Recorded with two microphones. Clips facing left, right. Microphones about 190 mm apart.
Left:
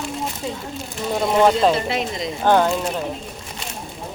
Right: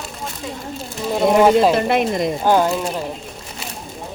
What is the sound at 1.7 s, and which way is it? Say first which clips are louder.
Speech: right 6 dB; 55° right (ahead or behind).